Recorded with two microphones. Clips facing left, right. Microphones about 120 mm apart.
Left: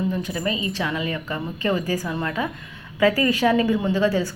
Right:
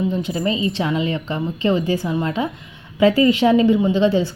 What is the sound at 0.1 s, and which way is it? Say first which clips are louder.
A woman's voice: right 4 dB; 25° right (ahead or behind).